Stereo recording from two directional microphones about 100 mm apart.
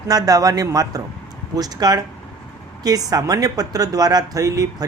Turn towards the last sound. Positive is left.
turn(degrees=-35)  # may be behind; listen again after turning